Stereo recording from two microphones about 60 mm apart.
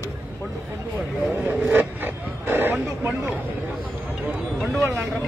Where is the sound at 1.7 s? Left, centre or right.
Right.